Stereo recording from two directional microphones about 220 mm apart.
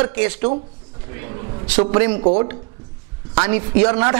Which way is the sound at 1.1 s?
10° right (ahead or behind).